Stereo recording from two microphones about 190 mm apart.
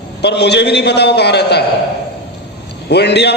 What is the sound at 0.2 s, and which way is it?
A man's voice, 60° left (ahead or behind).